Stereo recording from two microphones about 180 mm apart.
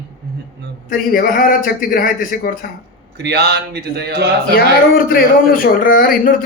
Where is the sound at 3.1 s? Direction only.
70° right (ahead or behind).